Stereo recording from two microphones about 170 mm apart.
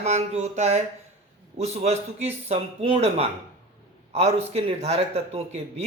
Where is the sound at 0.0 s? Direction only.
40° right (ahead or behind).